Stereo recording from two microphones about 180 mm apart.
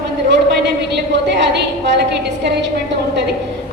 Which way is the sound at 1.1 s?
75° right (ahead or behind).